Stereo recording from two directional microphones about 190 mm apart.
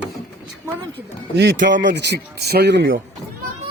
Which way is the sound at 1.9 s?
60° right (ahead or behind).